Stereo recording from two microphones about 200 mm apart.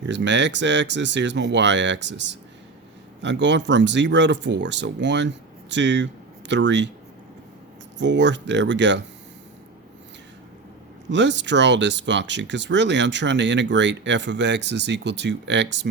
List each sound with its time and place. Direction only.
0.0 s speech: 60° right (ahead or behind)
7.9 s speech: 65° right (ahead or behind)
11.1 s speech: 60° right (ahead or behind)